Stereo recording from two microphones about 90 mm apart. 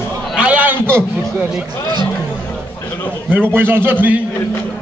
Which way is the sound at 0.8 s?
25° right (ahead or behind).